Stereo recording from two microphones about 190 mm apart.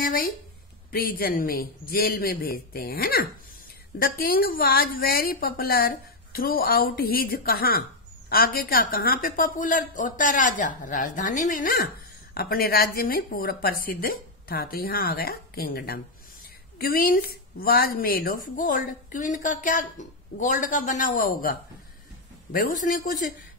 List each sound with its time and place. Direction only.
0.0 s speech: 45° left (ahead or behind)